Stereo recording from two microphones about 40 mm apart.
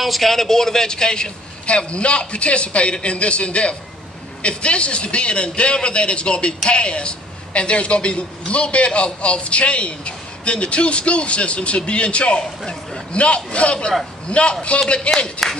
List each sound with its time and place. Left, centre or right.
0.0 s a man's voice: centre; by 15.4 s left